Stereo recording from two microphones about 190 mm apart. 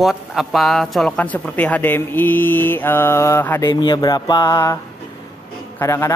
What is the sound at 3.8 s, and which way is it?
Mantra, 20° left (ahead or behind).